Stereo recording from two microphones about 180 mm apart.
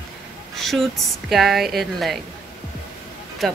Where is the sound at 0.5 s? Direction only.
Centre (ahead or behind).